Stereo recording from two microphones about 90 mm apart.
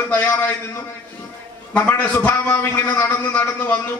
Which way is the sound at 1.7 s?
20° left (ahead or behind).